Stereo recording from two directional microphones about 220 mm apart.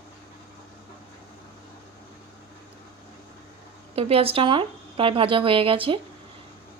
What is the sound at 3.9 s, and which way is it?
Speech, 25° right (ahead or behind).